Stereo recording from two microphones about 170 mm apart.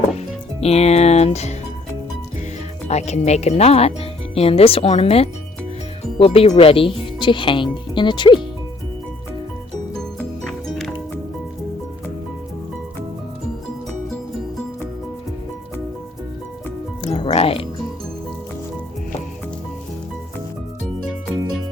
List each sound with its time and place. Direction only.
0.6 s music: 40° left (ahead or behind)
2.8 s speech: 40° left (ahead or behind)
9.9 s music: 5° left (ahead or behind)
17.0 s music: 35° left (ahead or behind)